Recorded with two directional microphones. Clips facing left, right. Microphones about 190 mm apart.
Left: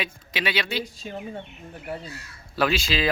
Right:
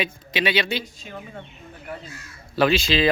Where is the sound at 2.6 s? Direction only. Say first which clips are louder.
Right 4 dB; 5° left (ahead or behind).